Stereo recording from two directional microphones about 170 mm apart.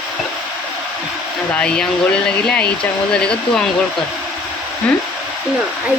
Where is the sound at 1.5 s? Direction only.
5° left (ahead or behind).